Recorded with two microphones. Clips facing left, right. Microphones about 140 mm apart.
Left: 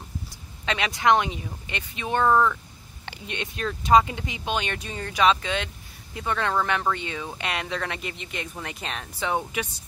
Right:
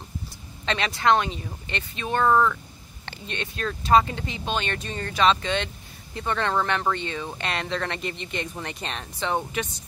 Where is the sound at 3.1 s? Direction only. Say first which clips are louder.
Even; 15° left (ahead or behind).